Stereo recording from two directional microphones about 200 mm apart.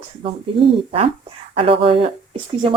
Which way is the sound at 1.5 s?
25° right (ahead or behind).